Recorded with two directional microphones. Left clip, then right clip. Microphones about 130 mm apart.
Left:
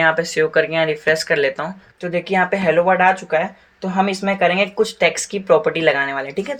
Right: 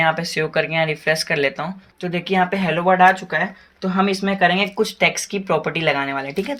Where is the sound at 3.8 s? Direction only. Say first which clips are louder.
Left 1 dB; 20° right (ahead or behind); by 6.5 s 35° right (ahead or behind).